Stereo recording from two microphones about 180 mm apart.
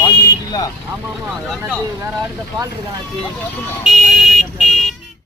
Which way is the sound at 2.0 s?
15° right (ahead or behind).